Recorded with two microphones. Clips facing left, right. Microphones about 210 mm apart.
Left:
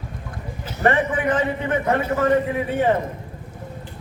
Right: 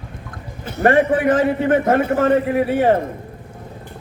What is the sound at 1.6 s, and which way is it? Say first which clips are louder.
Speech: right 5 dB; 50° right (ahead or behind).